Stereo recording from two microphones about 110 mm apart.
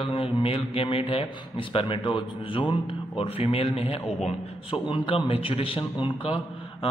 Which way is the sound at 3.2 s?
60° left (ahead or behind).